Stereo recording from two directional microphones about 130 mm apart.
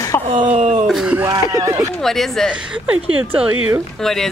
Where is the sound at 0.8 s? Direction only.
Centre (ahead or behind).